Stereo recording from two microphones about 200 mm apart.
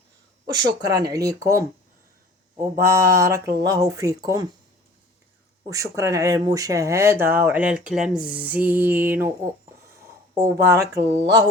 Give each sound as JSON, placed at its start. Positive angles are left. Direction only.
{"t": 0.4, "sound": "speech", "side_deg": -20}
{"t": 2.8, "sound": "speech", "side_deg": -15}
{"t": 5.6, "sound": "speech", "side_deg": -15}
{"t": 10.4, "sound": "speech", "side_deg": -15}